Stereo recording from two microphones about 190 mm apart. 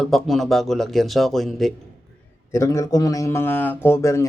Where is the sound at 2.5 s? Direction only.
15° left (ahead or behind).